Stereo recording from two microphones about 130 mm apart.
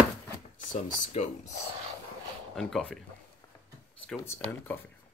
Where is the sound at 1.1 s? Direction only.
55° left (ahead or behind).